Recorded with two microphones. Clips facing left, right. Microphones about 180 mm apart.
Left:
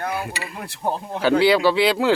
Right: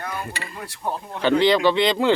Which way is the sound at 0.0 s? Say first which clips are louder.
Left 4 dB; 70° left (ahead or behind).